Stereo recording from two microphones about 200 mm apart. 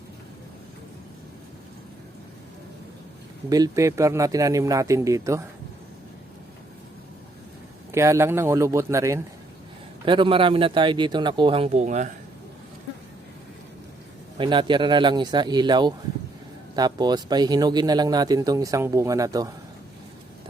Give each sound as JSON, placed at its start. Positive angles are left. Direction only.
{"t": 3.5, "sound": "a man's voice", "side_deg": -15}
{"t": 7.9, "sound": "a man's voice", "side_deg": -15}
{"t": 14.3, "sound": "speech", "side_deg": -25}